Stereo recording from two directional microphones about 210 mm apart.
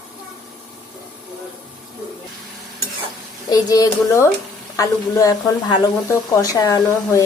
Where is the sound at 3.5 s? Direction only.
15° left (ahead or behind).